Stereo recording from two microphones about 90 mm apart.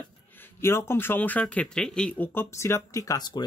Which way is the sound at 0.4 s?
30° left (ahead or behind).